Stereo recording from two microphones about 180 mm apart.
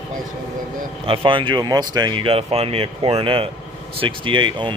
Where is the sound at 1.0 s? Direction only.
30° right (ahead or behind).